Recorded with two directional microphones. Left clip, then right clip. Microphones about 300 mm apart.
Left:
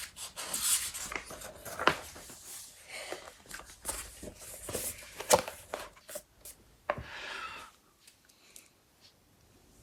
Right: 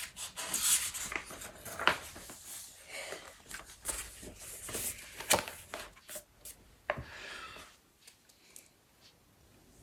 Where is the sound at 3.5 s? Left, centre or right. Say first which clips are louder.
Left 1 dB; centre.